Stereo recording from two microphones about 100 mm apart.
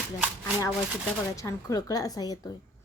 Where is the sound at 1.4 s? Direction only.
35° left (ahead or behind).